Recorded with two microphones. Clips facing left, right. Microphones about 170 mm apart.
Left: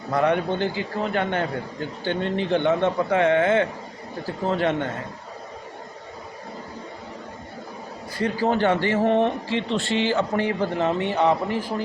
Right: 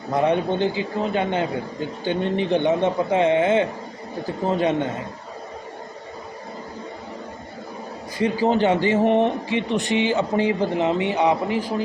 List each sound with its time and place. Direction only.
0.1 s speech: 20° right (ahead or behind)
8.2 s speech: 15° right (ahead or behind)